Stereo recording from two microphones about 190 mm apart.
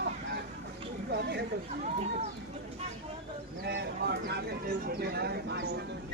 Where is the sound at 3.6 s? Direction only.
60° right (ahead or behind).